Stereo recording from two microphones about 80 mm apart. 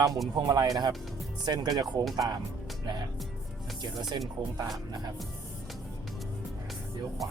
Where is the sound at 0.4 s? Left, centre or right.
Right.